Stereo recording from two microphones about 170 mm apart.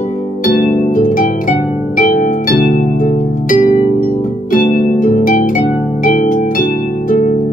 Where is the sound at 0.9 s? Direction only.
50° left (ahead or behind).